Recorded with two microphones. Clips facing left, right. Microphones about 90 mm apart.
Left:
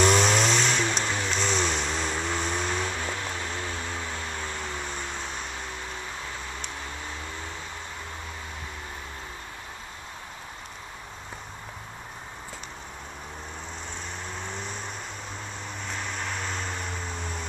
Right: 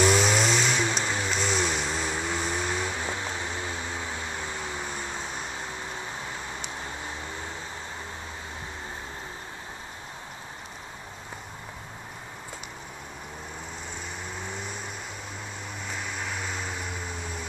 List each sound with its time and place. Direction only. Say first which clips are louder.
0.0 s vehicle: left 1 dB; 5° right (ahead or behind)
14.3 s vehicle: left 1 dB; 5° right (ahead or behind)
15.9 s a sound: left 1 dB; 5° right (ahead or behind)